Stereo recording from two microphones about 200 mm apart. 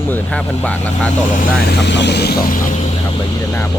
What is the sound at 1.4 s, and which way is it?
Speech, 55° left (ahead or behind).